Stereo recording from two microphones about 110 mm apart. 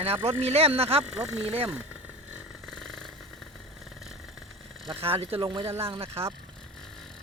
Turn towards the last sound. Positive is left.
turn(degrees=-60)  # may be behind; listen again after turning